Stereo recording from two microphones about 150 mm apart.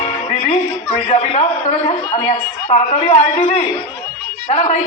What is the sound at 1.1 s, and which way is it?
A man's voice, 45° left (ahead or behind).